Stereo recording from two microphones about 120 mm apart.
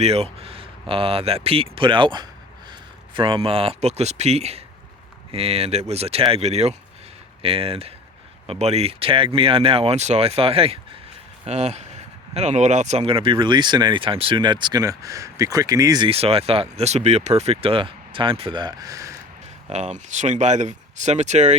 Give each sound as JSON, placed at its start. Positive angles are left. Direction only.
{"t": 0.0, "sound": "speech", "side_deg": -60}
{"t": 8.4, "sound": "speech", "side_deg": -65}
{"t": 11.4, "sound": "speech", "side_deg": -65}
{"t": 16.0, "sound": "speech", "side_deg": -55}
{"t": 19.7, "sound": "speech", "side_deg": -75}